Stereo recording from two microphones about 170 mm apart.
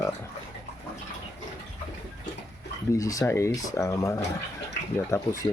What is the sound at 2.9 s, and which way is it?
Speech, 20° left (ahead or behind).